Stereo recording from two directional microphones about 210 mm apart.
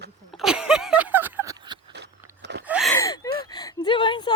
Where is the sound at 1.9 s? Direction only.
55° right (ahead or behind).